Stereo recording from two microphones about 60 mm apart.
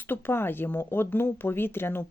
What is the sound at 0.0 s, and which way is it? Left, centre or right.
Speech, left.